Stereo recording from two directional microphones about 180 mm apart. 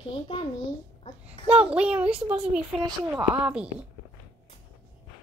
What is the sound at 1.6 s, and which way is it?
A woman's voice, 5° right (ahead or behind).